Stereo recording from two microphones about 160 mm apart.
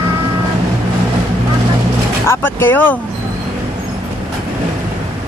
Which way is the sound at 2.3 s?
15° left (ahead or behind).